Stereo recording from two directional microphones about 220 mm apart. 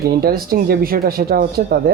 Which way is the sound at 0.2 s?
45° right (ahead or behind).